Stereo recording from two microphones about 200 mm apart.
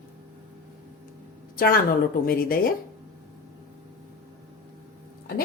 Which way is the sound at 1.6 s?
45° left (ahead or behind).